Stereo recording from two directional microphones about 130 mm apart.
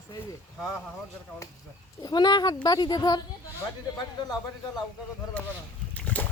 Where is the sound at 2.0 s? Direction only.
35° left (ahead or behind).